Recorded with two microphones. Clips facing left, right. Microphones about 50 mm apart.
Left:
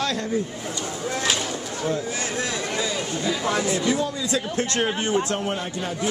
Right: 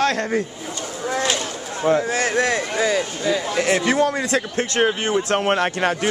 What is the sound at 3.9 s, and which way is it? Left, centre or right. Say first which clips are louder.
Speech: right 5 dB; right.